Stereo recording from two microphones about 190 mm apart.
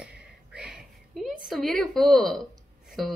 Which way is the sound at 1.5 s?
Centre (ahead or behind).